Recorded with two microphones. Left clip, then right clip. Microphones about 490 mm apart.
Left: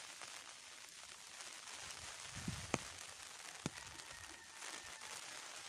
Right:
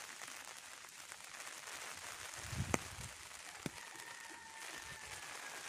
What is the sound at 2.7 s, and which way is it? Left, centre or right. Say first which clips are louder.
Chop: right 3 dB; left.